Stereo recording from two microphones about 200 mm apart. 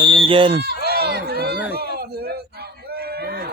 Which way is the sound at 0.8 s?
50° right (ahead or behind).